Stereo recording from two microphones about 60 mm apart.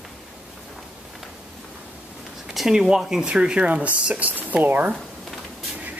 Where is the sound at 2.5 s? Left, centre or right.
Centre; by 4.9 s right.